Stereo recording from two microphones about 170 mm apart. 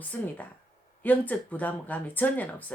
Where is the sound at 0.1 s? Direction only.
10° left (ahead or behind).